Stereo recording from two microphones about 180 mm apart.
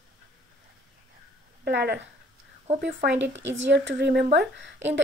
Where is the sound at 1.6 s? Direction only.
70° right (ahead or behind).